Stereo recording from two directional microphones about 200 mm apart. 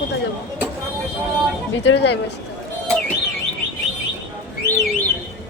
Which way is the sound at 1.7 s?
65° left (ahead or behind).